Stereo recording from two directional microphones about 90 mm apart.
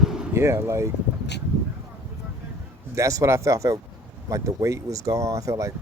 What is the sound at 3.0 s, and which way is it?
Speech, 35° right (ahead or behind).